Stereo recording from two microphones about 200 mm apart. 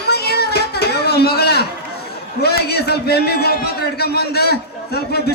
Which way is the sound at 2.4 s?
55° left (ahead or behind).